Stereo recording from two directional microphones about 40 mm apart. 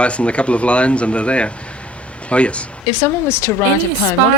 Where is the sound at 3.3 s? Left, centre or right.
Left.